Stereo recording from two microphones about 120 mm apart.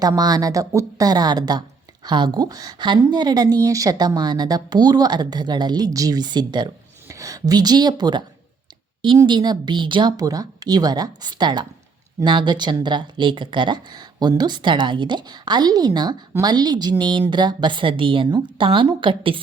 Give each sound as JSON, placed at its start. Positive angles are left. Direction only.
{"t": 0.2, "sound": "a woman's voice", "side_deg": -35}